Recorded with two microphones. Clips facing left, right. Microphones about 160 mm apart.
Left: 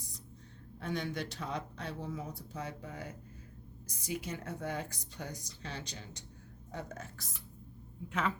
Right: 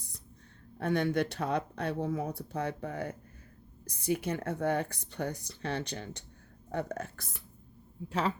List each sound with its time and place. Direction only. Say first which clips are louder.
0.8 s speech: right 8 dB; 60° right (ahead or behind)
8.0 s a woman's voice: right 3 dB; 35° right (ahead or behind)